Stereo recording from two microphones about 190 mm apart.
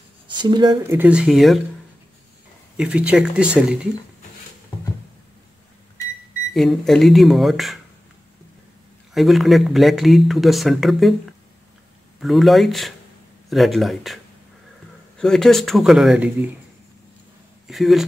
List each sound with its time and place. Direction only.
0.3 s speech: 25° right (ahead or behind)
0.9 s speech: 5° right (ahead or behind)
2.8 s speech: 5° right (ahead or behind)
6.5 s speech: centre (ahead or behind)
9.1 s speech: centre (ahead or behind)
17.6 s speech: centre (ahead or behind)